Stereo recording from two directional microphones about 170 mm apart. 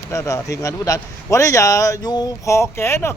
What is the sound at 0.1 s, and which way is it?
Speech, 15° left (ahead or behind).